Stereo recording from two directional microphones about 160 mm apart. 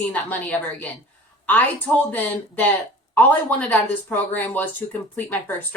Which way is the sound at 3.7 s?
10° left (ahead or behind).